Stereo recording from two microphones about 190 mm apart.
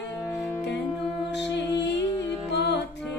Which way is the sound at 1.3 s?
65° left (ahead or behind).